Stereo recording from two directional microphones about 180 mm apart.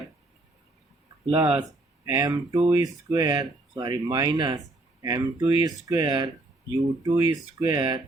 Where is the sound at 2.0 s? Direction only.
20° right (ahead or behind).